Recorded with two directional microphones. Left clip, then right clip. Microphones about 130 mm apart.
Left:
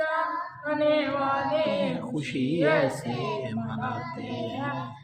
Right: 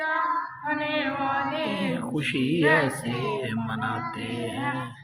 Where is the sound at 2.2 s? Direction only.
10° right (ahead or behind).